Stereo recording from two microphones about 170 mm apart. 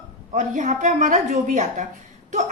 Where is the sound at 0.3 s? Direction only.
50° right (ahead or behind).